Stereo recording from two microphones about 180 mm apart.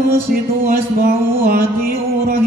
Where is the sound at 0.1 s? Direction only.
55° right (ahead or behind).